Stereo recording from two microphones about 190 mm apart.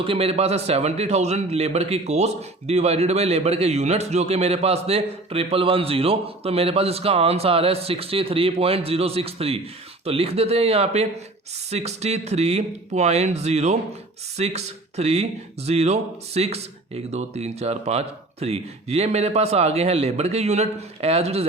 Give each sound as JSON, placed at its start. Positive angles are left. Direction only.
{"t": 0.0, "sound": "a man's voice", "side_deg": -30}